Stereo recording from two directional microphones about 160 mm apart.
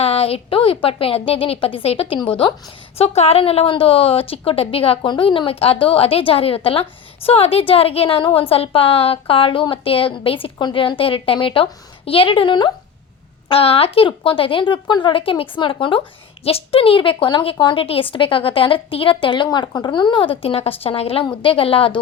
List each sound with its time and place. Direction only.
0.0 s speech: 35° left (ahead or behind)